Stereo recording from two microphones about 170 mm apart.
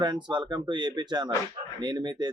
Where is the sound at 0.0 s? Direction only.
25° right (ahead or behind).